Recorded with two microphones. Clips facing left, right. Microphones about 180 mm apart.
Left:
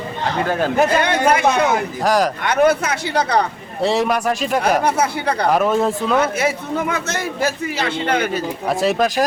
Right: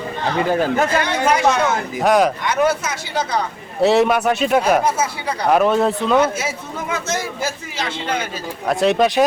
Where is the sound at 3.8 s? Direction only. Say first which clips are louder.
Right 3 dB; centre (ahead or behind).